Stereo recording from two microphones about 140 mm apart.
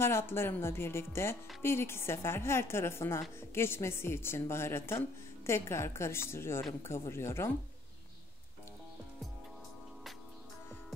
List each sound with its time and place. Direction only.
0.0 s a woman's voice: 15° left (ahead or behind)